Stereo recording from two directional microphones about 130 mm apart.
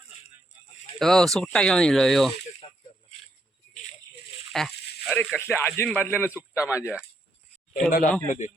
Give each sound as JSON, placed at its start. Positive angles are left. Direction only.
{"t": 0.9, "sound": "speech", "side_deg": 5}
{"t": 2.6, "sound": "a sound", "side_deg": 45}
{"t": 4.5, "sound": "snake", "side_deg": 5}
{"t": 5.4, "sound": "speech", "side_deg": 20}
{"t": 7.9, "sound": "speech", "side_deg": 90}
{"t": 8.3, "sound": "speech", "side_deg": 70}